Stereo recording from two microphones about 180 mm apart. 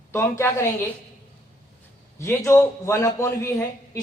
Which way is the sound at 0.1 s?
15° left (ahead or behind).